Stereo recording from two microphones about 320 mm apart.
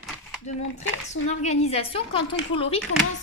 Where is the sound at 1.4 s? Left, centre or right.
Centre.